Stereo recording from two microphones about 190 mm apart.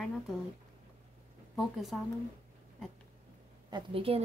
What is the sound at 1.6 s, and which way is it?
Speech, centre (ahead or behind).